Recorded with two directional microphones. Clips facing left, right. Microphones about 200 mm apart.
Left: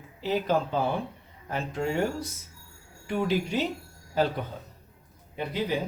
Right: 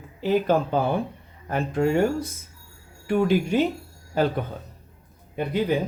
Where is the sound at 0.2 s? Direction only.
55° right (ahead or behind).